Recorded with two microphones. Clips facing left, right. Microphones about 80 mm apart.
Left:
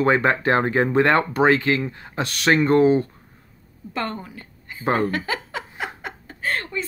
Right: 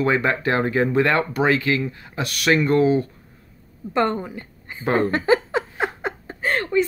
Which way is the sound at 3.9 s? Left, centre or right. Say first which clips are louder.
Right 7 dB; right.